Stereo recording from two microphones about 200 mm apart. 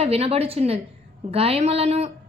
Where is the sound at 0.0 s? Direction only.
30° right (ahead or behind).